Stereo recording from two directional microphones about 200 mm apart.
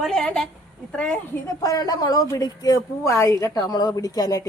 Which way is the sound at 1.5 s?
20° left (ahead or behind).